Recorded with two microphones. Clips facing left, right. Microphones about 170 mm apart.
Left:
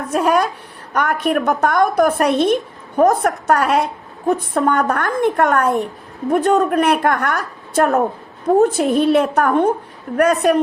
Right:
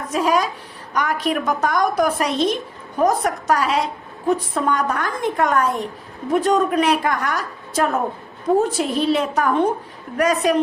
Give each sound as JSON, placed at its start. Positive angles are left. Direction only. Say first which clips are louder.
{"t": 0.1, "sound": "a woman's voice", "louder": "left 3 dB", "side_deg": 55}